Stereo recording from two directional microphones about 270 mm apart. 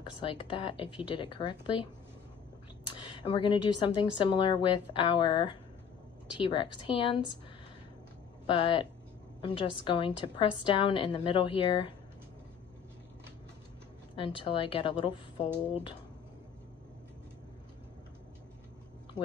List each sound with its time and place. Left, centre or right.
0.0 s a woman's voice: centre
2.9 s a woman's voice: centre
8.5 s a woman's voice: centre
14.1 s a woman's voice: centre